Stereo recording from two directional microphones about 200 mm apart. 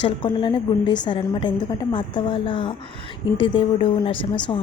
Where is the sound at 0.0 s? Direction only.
25° left (ahead or behind).